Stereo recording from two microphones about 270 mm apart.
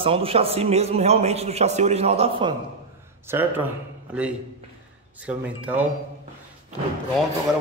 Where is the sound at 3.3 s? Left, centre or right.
Centre.